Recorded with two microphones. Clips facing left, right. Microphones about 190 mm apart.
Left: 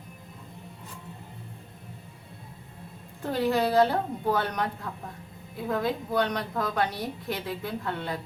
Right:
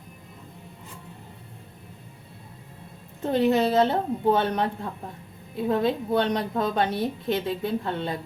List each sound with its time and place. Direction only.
3.2 s a woman's voice: 20° right (ahead or behind)